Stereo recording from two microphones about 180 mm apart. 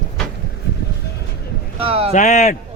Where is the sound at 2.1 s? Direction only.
45° left (ahead or behind).